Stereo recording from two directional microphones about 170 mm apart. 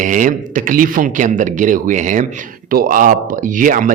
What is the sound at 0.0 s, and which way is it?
Speech, 50° right (ahead or behind).